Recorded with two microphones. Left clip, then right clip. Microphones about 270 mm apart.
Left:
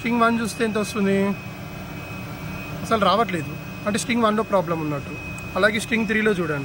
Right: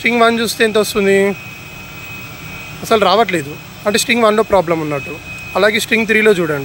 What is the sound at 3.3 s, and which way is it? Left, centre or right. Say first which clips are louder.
Speech: right 9 dB; centre.